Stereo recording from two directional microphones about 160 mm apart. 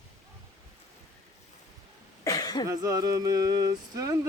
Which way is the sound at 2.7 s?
25° right (ahead or behind).